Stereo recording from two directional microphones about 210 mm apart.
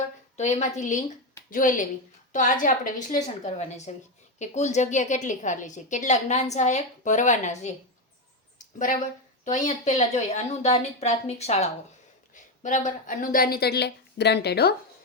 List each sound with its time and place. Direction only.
0.3 s a woman's voice: 35° left (ahead or behind)
8.5 s a sound: 40° left (ahead or behind)
9.4 s a woman's voice: 35° left (ahead or behind); by 14.8 s 50° left (ahead or behind)